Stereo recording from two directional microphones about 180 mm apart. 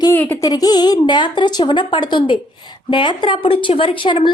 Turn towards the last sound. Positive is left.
turn(degrees=25)  # may be behind; listen again after turning